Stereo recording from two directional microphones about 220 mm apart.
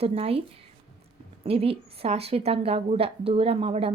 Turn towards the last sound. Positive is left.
turn(degrees=-25)  # may be behind; listen again after turning